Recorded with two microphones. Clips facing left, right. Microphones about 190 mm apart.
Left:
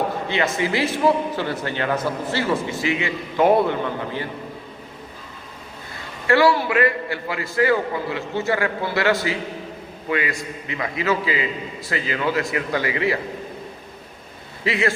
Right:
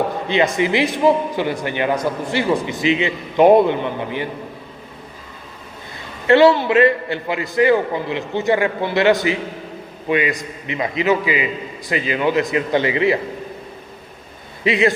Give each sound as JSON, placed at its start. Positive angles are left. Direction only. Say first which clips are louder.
{"t": 0.3, "sound": "a man's voice", "louder": "right 8 dB", "side_deg": -15}
{"t": 6.2, "sound": "a man's voice", "louder": "right 5 dB", "side_deg": -20}
{"t": 14.6, "sound": "speech", "louder": "right 5 dB", "side_deg": -20}